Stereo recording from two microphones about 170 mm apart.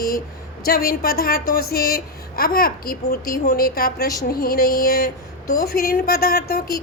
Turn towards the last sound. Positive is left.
turn(degrees=65)  # may be behind; listen again after turning